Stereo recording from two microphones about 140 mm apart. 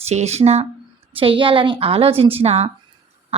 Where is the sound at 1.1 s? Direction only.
40° right (ahead or behind).